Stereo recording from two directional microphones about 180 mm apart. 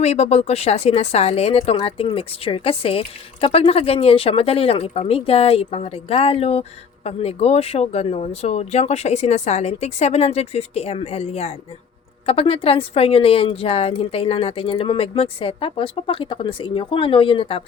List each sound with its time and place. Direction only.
0.0 s speech: 35° left (ahead or behind)